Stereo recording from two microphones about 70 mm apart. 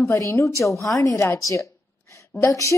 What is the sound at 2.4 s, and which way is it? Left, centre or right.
Speech, left.